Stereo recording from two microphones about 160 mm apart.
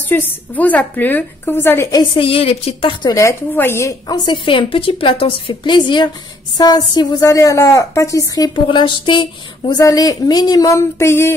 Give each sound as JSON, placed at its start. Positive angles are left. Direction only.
{"t": 0.1, "sound": "a woman's voice", "side_deg": 10}
{"t": 4.1, "sound": "a woman's voice", "side_deg": 30}
{"t": 8.6, "sound": "speech", "side_deg": 30}